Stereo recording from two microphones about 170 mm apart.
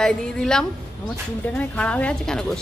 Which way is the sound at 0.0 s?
5° left (ahead or behind).